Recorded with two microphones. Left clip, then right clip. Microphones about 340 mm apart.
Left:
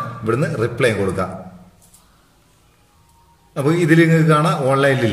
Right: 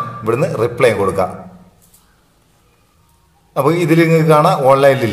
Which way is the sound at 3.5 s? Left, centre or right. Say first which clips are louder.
Right 3 dB; centre.